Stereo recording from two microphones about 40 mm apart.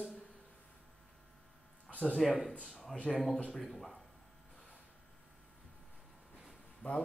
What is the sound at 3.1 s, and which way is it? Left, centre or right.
Speech, left.